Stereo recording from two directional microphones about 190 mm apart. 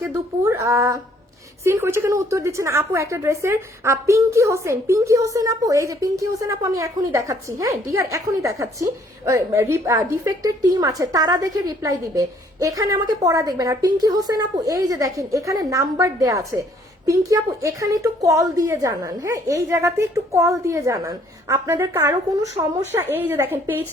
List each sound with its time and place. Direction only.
0.0 s a woman's voice: 15° right (ahead or behind)